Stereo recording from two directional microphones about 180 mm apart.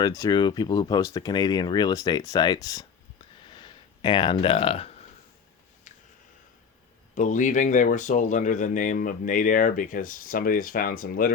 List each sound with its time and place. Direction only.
0.0 s speech: 20° left (ahead or behind)
3.4 s a sound: 25° left (ahead or behind)
7.2 s speech: 45° left (ahead or behind)